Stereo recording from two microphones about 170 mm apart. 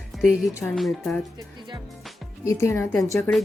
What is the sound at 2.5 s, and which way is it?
Speech, 15° left (ahead or behind).